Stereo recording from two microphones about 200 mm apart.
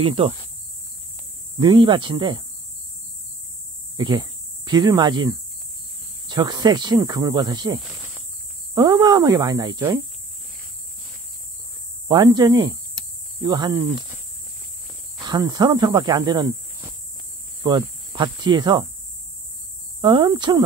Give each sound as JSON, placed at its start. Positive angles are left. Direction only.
{"t": 0.0, "sound": "speech", "side_deg": -30}
{"t": 1.6, "sound": "speech", "side_deg": -20}
{"t": 3.9, "sound": "speech", "side_deg": -20}
{"t": 7.8, "sound": "cricket", "side_deg": -10}
{"t": 8.7, "sound": "speech", "side_deg": -20}
{"t": 12.1, "sound": "speech", "side_deg": -20}
{"t": 15.2, "sound": "speech", "side_deg": -20}
{"t": 20.0, "sound": "speech", "side_deg": -20}